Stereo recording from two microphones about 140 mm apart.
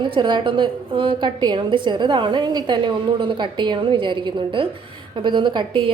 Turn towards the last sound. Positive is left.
turn(degrees=-35)  # may be behind; listen again after turning